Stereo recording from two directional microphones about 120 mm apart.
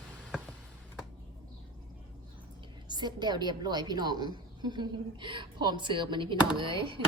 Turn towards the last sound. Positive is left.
turn(degrees=-45)  # may be behind; listen again after turning